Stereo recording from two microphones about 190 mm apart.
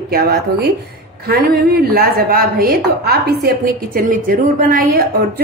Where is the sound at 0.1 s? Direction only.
50° right (ahead or behind).